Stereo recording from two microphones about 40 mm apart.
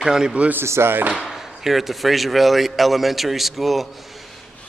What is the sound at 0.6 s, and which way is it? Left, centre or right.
Speech, right.